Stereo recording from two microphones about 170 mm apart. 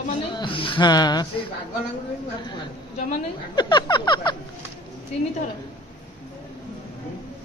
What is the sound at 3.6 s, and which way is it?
Speech, 25° left (ahead or behind).